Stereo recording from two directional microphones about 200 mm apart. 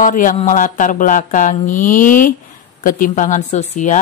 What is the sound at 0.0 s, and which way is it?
A woman's voice, 40° left (ahead or behind).